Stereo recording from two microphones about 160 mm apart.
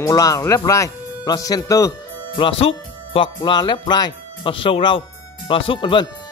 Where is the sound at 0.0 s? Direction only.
20° left (ahead or behind).